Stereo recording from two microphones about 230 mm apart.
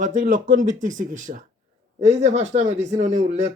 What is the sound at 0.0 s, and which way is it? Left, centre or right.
Speech, right.